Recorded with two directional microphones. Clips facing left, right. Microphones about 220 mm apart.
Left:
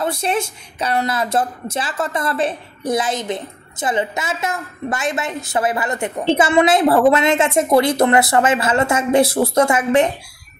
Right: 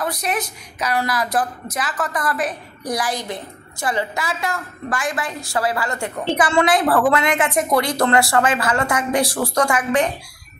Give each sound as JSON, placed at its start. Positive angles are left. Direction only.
{"t": 0.0, "sound": "a woman's voice", "side_deg": 25}